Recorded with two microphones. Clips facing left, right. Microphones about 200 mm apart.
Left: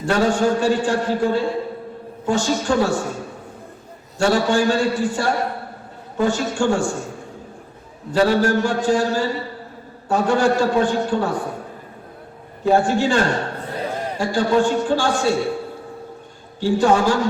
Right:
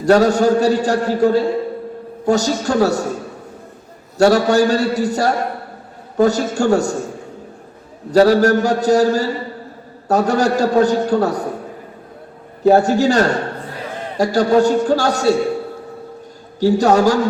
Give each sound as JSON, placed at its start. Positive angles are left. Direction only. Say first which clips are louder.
{"t": 0.0, "sound": "a man's voice", "louder": "right 6 dB", "side_deg": -40}
{"t": 4.2, "sound": "a man's voice", "louder": "right 5 dB", "side_deg": -40}
{"t": 8.1, "sound": "a man's voice", "louder": "right 5 dB", "side_deg": -40}
{"t": 12.6, "sound": "a man's voice", "louder": "right 5 dB", "side_deg": -40}
{"t": 16.6, "sound": "a man's voice", "louder": "right 4 dB", "side_deg": -40}